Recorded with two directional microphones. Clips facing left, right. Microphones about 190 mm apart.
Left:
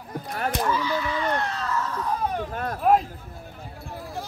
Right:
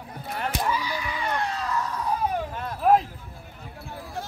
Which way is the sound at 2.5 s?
50° left (ahead or behind).